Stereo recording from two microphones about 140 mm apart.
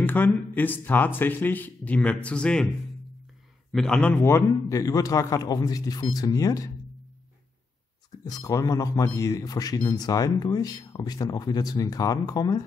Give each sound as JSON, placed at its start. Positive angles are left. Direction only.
{"t": 0.0, "sound": "speech", "side_deg": 15}
{"t": 3.7, "sound": "speech", "side_deg": 5}
{"t": 8.2, "sound": "speech", "side_deg": 25}